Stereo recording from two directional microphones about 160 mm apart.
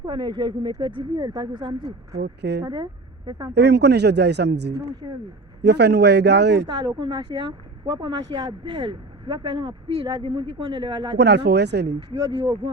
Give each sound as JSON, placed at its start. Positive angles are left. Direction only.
{"t": 0.0, "sound": "speech", "side_deg": -30}
{"t": 2.1, "sound": "speech", "side_deg": -90}
{"t": 3.2, "sound": "speech", "side_deg": -25}
{"t": 3.5, "sound": "speech", "side_deg": -90}
{"t": 5.0, "sound": "speech", "side_deg": -30}
{"t": 5.6, "sound": "speech", "side_deg": -90}
{"t": 6.7, "sound": "speech", "side_deg": -25}
{"t": 11.2, "sound": "speech", "side_deg": -90}
{"t": 12.1, "sound": "speech", "side_deg": -25}